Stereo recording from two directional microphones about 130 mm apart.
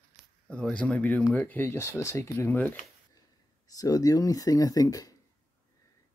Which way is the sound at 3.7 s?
30° left (ahead or behind).